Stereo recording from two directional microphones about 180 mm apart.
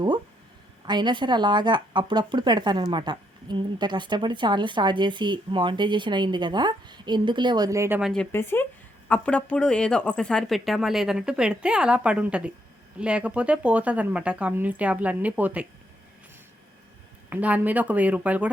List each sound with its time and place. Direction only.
0.9 s a woman's voice: 25° right (ahead or behind)
8.1 s a woman's voice: 10° left (ahead or behind); by 15.6 s 10° right (ahead or behind)
17.2 s speech: 10° right (ahead or behind)